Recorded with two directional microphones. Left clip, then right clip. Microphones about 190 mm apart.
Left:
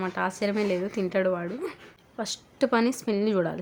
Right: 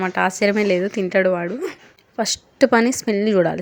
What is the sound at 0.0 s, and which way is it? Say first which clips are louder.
A woman's voice: right 10 dB; 30° right (ahead or behind).